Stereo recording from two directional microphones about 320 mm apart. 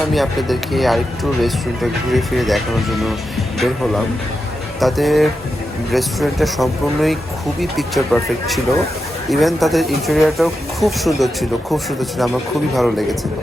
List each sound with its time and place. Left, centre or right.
0.1 s speech: centre